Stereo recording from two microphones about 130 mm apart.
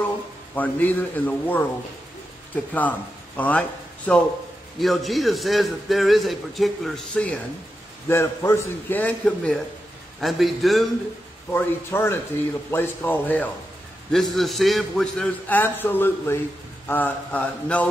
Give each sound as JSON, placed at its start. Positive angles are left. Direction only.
{"t": 0.6, "sound": "speech", "side_deg": 15}
{"t": 4.7, "sound": "a man's voice", "side_deg": 0}
{"t": 8.1, "sound": "a man's voice", "side_deg": 20}
{"t": 11.5, "sound": "speech", "side_deg": 20}
{"t": 14.1, "sound": "a man's voice", "side_deg": 0}
{"t": 15.4, "sound": "speech", "side_deg": 15}